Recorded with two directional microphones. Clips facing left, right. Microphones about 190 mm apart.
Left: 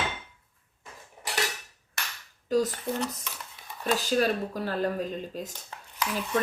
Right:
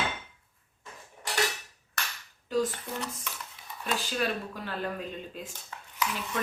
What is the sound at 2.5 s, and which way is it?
Speech, 40° left (ahead or behind).